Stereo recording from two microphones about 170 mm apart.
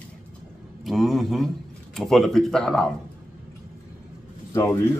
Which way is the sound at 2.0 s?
Centre (ahead or behind).